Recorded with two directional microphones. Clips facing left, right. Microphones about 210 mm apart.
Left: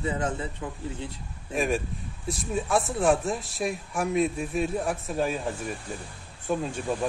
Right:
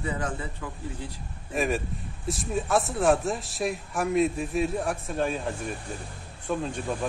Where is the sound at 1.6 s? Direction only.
Centre (ahead or behind).